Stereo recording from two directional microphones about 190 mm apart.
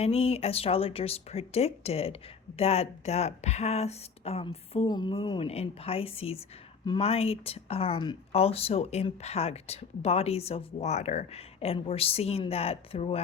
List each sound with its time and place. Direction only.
0.0 s speech: 30° left (ahead or behind)